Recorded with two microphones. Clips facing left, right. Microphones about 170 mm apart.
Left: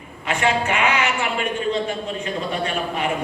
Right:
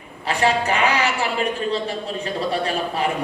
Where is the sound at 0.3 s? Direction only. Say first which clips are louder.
Right 1 dB; 35° right (ahead or behind).